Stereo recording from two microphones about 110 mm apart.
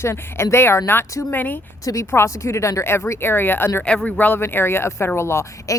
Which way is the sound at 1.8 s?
25° left (ahead or behind).